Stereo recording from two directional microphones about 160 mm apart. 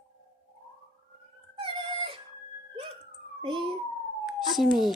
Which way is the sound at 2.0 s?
35° right (ahead or behind).